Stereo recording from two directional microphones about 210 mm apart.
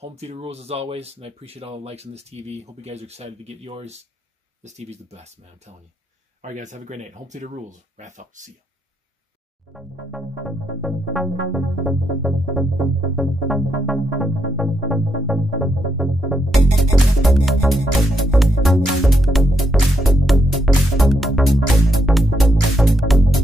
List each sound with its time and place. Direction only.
0.0 s speech: 30° right (ahead or behind)
9.7 s music: centre (ahead or behind)